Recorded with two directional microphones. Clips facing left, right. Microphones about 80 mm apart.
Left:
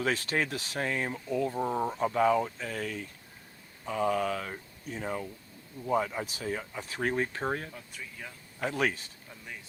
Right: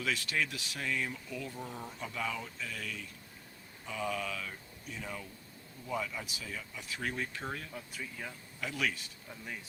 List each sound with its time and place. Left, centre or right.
0.0 s speech: left
7.7 s speech: centre
8.6 s speech: left